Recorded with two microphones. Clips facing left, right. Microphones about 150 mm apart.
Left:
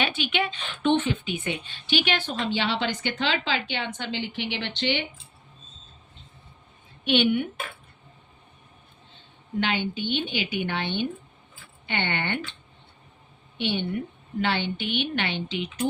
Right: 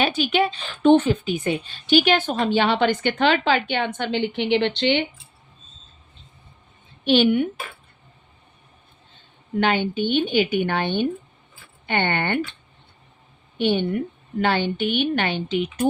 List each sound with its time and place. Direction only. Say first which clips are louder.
0.0 s a woman's voice: right 7 dB; 40° right (ahead or behind); by 5.0 s 60° right (ahead or behind)
7.0 s a woman's voice: right 5 dB; 35° right (ahead or behind)
9.6 s a woman's voice: right 6 dB; 50° right (ahead or behind)
13.6 s a woman's voice: right 7 dB; 45° right (ahead or behind)